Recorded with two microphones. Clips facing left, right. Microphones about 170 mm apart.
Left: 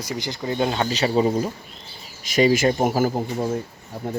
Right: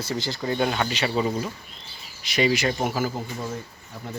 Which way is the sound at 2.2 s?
45° left (ahead or behind).